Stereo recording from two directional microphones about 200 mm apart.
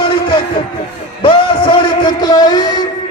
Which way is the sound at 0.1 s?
25° left (ahead or behind).